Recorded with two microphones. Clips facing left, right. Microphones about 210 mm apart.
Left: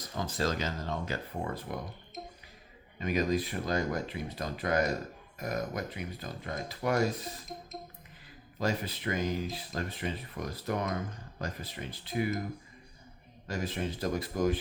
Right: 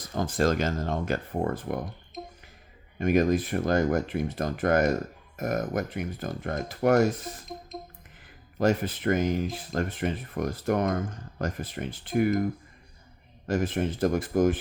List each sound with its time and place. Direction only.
0.0 s speech: 50° right (ahead or behind)
3.0 s speech: 50° right (ahead or behind)
8.5 s speech: 50° right (ahead or behind)
13.5 s speech: 50° right (ahead or behind)